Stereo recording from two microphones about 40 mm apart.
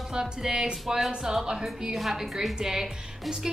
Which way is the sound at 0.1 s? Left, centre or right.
Centre.